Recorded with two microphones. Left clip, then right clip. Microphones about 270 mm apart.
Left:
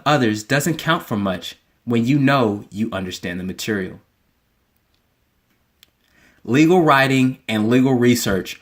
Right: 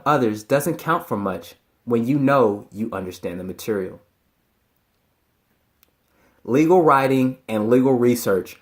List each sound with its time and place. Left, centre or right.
0.0 s speech: left
6.4 s speech: left